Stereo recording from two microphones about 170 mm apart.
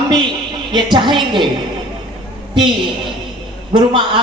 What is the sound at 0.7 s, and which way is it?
Speech, 25° right (ahead or behind).